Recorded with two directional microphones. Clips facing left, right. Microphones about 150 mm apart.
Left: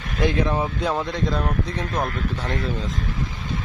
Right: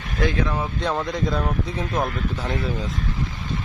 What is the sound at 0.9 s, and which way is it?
Speech, centre (ahead or behind).